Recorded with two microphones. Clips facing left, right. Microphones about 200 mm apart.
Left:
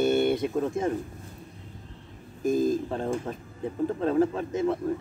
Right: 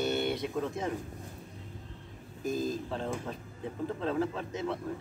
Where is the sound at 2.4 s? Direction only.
50° left (ahead or behind).